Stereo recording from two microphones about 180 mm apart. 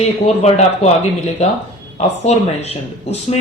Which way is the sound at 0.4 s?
35° left (ahead or behind).